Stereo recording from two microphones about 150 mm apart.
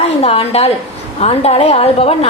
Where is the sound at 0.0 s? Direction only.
40° left (ahead or behind).